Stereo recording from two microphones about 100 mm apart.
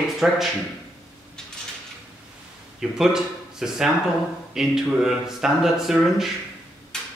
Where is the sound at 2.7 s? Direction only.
5° right (ahead or behind).